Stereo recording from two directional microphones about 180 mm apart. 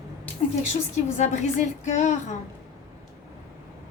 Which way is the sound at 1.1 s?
40° left (ahead or behind).